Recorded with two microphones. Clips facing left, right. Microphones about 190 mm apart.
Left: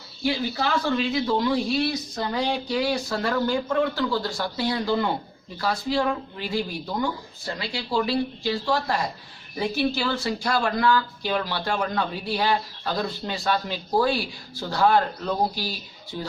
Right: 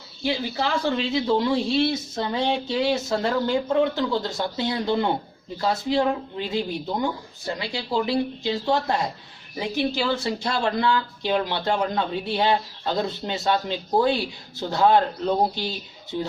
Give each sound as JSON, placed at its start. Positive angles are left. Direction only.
{"t": 0.5, "sound": "speech", "side_deg": -25}